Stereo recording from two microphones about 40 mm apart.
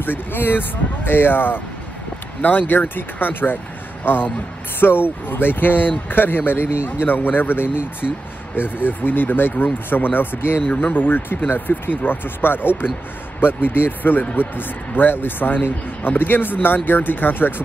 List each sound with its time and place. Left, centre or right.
0.0 s a man's voice: left
10.8 s speech: left